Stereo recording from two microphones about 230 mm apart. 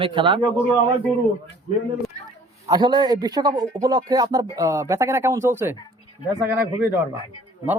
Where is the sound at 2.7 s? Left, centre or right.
Centre.